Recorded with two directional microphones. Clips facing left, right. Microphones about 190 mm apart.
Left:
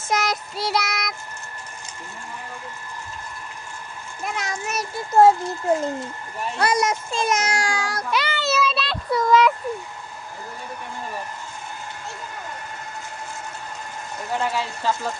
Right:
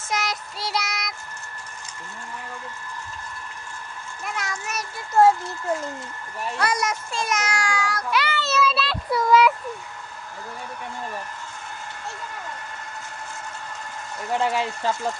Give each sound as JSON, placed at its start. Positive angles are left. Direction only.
{"t": 0.1, "sound": "child singing", "side_deg": 45}
{"t": 4.2, "sound": "a child's voice", "side_deg": 20}
{"t": 8.2, "sound": "child singing", "side_deg": 15}
{"t": 8.5, "sound": "child singing", "side_deg": -5}
{"t": 14.5, "sound": "speech", "side_deg": -20}